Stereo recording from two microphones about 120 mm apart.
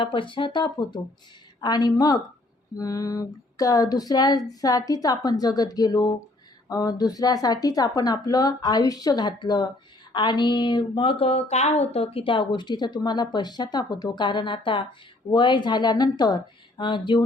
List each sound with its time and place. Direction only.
0.0 s speech: 45° left (ahead or behind)